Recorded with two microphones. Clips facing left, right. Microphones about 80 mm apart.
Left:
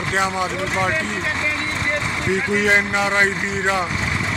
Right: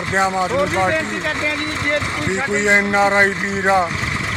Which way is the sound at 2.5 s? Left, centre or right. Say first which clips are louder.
Right 3 dB; right.